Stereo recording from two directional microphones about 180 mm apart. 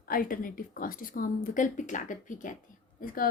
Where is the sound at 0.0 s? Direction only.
50° left (ahead or behind).